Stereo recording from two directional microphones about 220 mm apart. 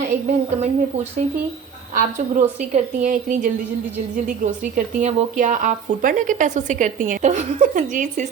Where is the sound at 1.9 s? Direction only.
35° right (ahead or behind).